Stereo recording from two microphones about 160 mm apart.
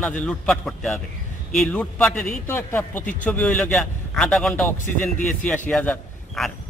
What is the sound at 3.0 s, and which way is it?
Speech, 55° left (ahead or behind).